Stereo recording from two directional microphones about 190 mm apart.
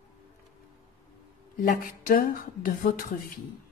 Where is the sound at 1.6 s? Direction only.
45° left (ahead or behind).